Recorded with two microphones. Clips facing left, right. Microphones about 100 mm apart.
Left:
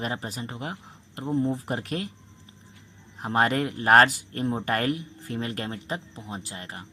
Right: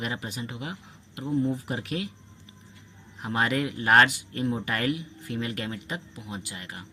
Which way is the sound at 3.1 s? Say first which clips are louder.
Left 3 dB; 40° left (ahead or behind).